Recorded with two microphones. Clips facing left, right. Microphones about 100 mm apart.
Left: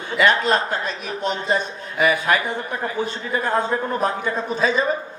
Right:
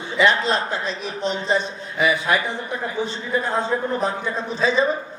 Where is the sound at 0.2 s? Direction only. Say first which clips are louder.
Left 1 dB; 50° left (ahead or behind).